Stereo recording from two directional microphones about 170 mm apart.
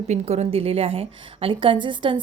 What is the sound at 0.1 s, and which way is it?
A woman's voice, 40° right (ahead or behind).